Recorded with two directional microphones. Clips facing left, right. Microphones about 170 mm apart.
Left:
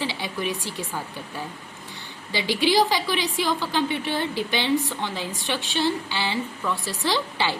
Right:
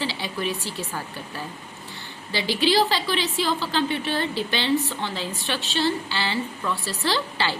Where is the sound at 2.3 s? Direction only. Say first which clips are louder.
Even; 15° left (ahead or behind).